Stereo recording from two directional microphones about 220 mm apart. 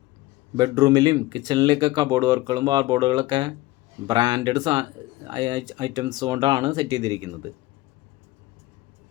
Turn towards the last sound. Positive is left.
turn(degrees=-20)  # may be behind; listen again after turning